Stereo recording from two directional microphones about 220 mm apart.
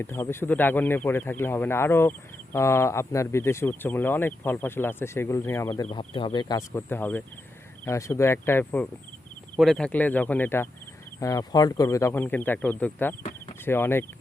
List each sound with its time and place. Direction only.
0.0 s speech: 10° left (ahead or behind)
5.9 s speech: 25° left (ahead or behind)